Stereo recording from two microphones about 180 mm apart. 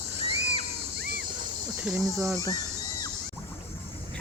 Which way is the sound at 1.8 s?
10° right (ahead or behind).